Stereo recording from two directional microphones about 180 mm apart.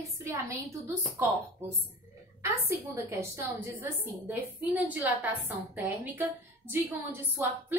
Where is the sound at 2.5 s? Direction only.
15° right (ahead or behind).